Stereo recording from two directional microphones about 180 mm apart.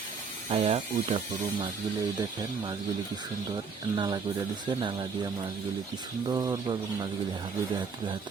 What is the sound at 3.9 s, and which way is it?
Speech, 25° right (ahead or behind).